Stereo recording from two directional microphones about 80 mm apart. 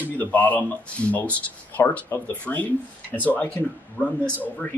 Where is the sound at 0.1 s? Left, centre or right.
Left.